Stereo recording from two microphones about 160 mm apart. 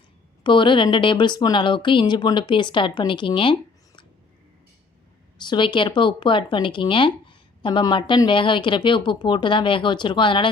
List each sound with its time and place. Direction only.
0.4 s speech: 30° left (ahead or behind)
5.4 s speech: 30° left (ahead or behind)